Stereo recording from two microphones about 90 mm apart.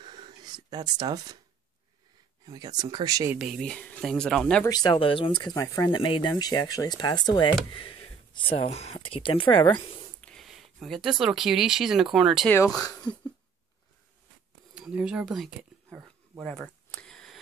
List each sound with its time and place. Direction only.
0.0 s a sound: 60° right (ahead or behind)
2.4 s speech: 45° right (ahead or behind)
3.3 s speech: 5° right (ahead or behind)
3.6 s speech: 15° left (ahead or behind)
4.6 s speech: 50° left (ahead or behind)
4.9 s speech: 75° left (ahead or behind); by 7.5 s 55° left (ahead or behind)
8.4 s speech: 80° left
9.5 s a woman's voice: 60° left (ahead or behind)
10.2 s speech: centre (ahead or behind)
12.9 s speech: 10° left (ahead or behind)
14.7 s speech: 10° right (ahead or behind)
16.4 s speech: 5° left (ahead or behind)
17.0 s a sound: 5° left (ahead or behind)